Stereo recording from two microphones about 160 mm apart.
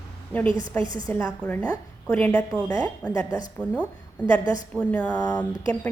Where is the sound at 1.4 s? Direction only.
5° left (ahead or behind).